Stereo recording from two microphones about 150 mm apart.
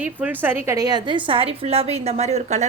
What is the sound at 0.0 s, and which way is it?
A woman's voice, 10° right (ahead or behind).